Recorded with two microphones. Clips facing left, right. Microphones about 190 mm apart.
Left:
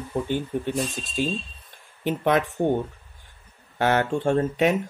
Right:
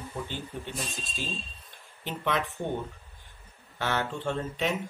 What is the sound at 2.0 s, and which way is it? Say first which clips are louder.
Speech: left 8 dB; 50° left (ahead or behind).